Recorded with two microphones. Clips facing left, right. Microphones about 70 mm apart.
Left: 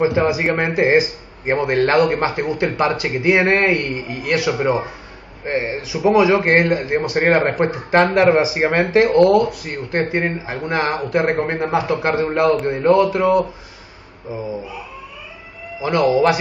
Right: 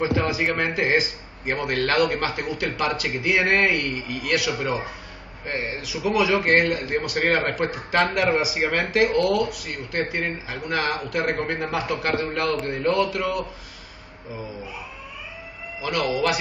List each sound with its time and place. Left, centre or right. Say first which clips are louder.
0.0 s a man's voice: left 6 dB; left
15.8 s a man's voice: left 8 dB; left